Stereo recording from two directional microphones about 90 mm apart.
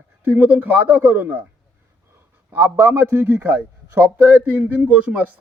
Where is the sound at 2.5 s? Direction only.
20° right (ahead or behind).